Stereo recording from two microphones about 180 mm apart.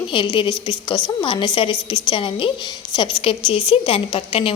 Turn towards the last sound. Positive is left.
turn(degrees=30)  # may be behind; listen again after turning